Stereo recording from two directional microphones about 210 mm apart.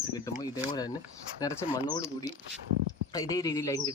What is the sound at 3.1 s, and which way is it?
Speech, 15° left (ahead or behind).